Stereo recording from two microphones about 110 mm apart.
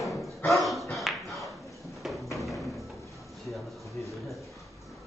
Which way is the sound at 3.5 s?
Centre (ahead or behind).